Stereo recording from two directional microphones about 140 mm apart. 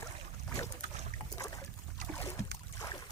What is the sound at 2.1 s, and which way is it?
Boat, 20° left (ahead or behind).